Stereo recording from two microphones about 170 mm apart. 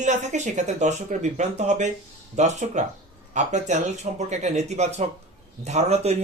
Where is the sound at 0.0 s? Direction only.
45° right (ahead or behind).